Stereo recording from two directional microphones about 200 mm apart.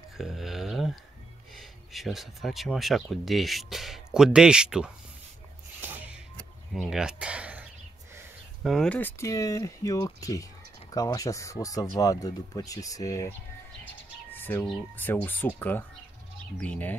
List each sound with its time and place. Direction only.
0.2 s a sound: centre (ahead or behind)
1.5 s speech: centre (ahead or behind)
5.8 s music: 5° right (ahead or behind)
6.7 s speech: 5° right (ahead or behind)
8.6 s speech: 5° left (ahead or behind)
14.3 s bird: 10° left (ahead or behind)
15.2 s speech: 10° left (ahead or behind)